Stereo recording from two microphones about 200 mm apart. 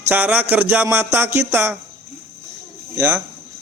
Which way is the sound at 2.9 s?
10° right (ahead or behind).